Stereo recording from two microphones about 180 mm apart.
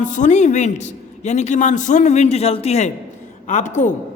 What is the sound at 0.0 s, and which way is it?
A man's voice, 45° left (ahead or behind).